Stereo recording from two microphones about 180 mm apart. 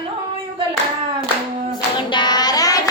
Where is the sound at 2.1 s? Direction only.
25° left (ahead or behind).